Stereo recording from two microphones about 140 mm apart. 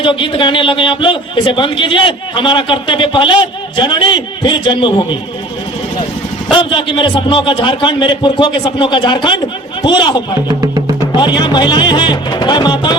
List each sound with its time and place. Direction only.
0.0 s a man's voice: 35° left (ahead or behind)
6.6 s a man's voice: 35° left (ahead or behind)